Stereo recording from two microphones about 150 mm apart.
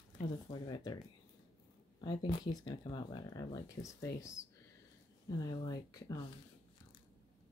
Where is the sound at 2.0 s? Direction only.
30° left (ahead or behind).